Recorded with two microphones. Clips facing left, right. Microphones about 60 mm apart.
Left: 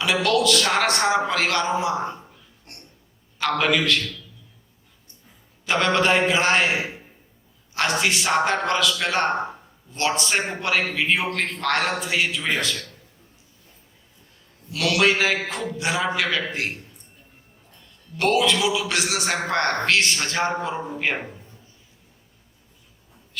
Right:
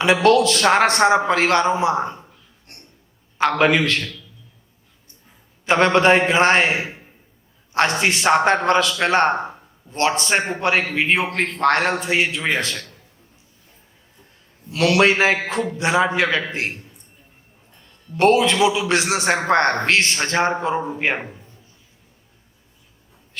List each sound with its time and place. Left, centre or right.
0.0 s a man's voice: right
3.6 s a man's voice: right
5.6 s a man's voice: right
14.7 s a man's voice: right
18.2 s a man's voice: right